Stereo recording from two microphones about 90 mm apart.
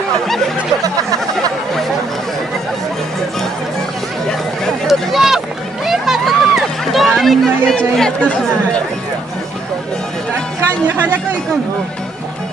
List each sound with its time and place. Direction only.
0.8 s music: 40° right (ahead or behind)
4.8 s a sound: 5° right (ahead or behind)
5.9 s run: 5° right (ahead or behind); by 8.8 s 10° left (ahead or behind)